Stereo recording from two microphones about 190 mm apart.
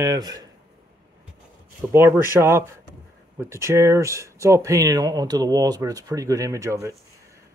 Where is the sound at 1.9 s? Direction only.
15° right (ahead or behind).